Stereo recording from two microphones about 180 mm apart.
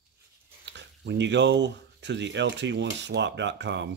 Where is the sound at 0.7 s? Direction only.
75° right (ahead or behind).